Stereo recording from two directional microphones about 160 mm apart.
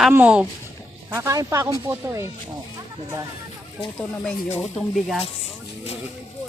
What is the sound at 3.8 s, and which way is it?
Speech, centre (ahead or behind).